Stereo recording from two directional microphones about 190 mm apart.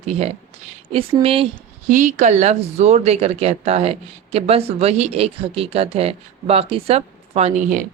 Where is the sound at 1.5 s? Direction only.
40° right (ahead or behind).